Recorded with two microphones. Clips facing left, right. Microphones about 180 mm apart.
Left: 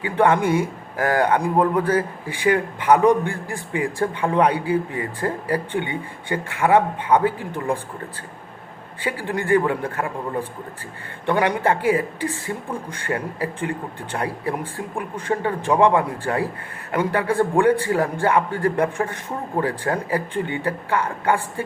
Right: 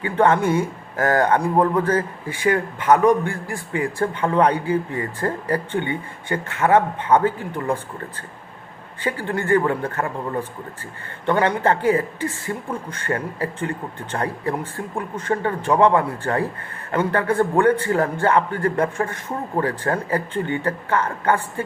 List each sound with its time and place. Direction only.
0.0 s a man's voice: 15° left (ahead or behind)
9.0 s a man's voice: 15° left (ahead or behind)